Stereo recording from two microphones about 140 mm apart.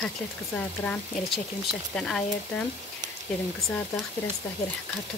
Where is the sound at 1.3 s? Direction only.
Centre (ahead or behind).